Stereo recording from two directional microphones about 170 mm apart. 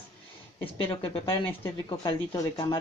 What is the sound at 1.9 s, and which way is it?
Speech, 25° left (ahead or behind).